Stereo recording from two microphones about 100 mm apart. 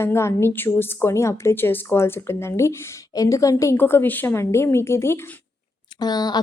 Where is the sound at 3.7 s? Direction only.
20° left (ahead or behind).